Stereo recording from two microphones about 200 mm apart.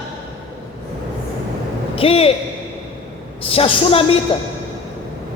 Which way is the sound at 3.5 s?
30° left (ahead or behind).